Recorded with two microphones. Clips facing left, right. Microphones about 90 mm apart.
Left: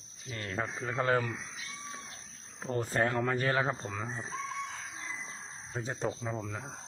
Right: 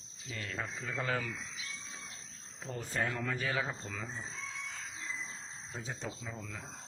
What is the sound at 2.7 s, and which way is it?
A man's voice, 45° left (ahead or behind).